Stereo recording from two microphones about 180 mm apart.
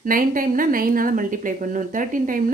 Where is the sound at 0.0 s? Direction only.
50° right (ahead or behind).